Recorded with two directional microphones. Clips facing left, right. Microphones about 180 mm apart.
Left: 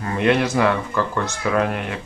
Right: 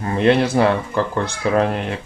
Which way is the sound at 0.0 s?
30° right (ahead or behind).